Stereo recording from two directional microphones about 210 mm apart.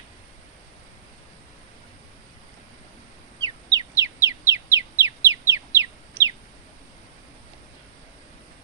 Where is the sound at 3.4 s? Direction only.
20° right (ahead or behind).